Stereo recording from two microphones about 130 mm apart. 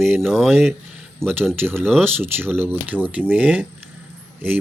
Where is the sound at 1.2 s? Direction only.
15° right (ahead or behind).